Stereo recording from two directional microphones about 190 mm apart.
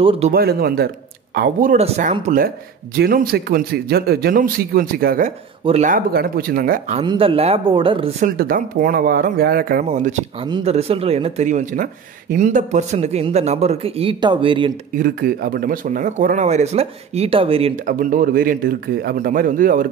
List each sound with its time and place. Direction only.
0.0 s speech: 30° right (ahead or behind)
0.3 s speech: 50° right (ahead or behind)
1.8 s speech: 40° right (ahead or behind)
7.0 s speech: 30° right (ahead or behind)
8.4 s speech: 50° right (ahead or behind)
10.4 s speech: 30° right (ahead or behind)
15.0 s speech: 50° right (ahead or behind); by 17.7 s 30° right (ahead or behind)
17.8 s speech: 45° right (ahead or behind)